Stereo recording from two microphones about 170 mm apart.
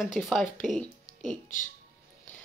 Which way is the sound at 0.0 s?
Centre (ahead or behind).